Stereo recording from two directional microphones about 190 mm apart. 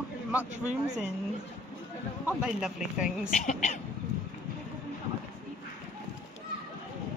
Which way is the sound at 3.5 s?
40° left (ahead or behind).